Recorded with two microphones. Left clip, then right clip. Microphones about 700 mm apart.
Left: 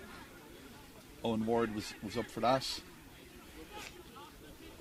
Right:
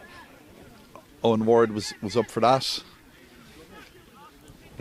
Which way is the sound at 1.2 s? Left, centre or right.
Right.